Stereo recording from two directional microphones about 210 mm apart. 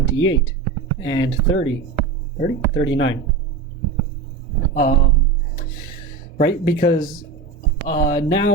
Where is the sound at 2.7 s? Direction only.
65° left (ahead or behind).